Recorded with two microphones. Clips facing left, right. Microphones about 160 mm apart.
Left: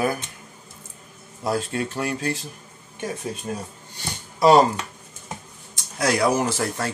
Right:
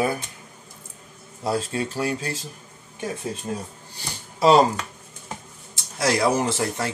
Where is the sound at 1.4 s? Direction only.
30° right (ahead or behind).